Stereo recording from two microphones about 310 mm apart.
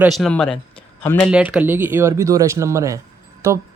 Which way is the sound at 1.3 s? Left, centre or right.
Centre.